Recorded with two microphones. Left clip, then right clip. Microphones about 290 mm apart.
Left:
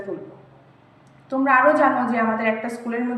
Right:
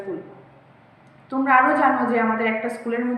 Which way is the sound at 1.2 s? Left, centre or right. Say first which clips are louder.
Left 1 dB; centre.